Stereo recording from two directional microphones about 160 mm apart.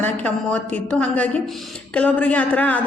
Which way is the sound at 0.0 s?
10° left (ahead or behind).